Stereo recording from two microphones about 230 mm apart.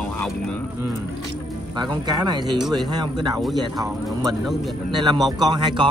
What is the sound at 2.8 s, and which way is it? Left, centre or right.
Speech, centre.